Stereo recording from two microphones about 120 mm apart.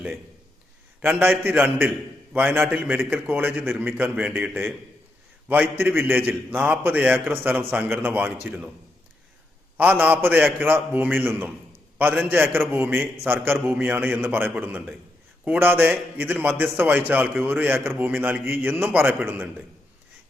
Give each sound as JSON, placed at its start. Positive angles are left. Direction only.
{"t": 1.0, "sound": "a man's voice", "side_deg": -15}
{"t": 9.7, "sound": "a man's voice", "side_deg": -15}